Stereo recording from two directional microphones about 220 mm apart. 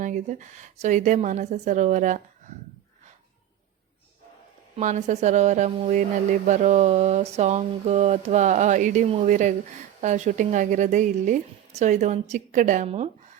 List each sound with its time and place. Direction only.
0.0 s speech: 35° right (ahead or behind)
4.8 s speech: 30° right (ahead or behind)